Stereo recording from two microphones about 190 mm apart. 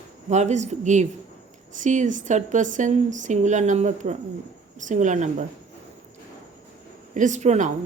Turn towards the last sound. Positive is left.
turn(degrees=-40)  # may be behind; listen again after turning